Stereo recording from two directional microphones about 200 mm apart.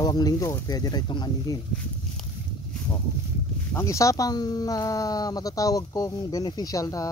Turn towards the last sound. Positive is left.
turn(degrees=15)  # may be behind; listen again after turning